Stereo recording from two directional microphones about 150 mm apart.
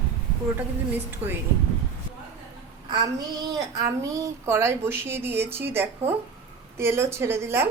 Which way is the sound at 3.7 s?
20° right (ahead or behind).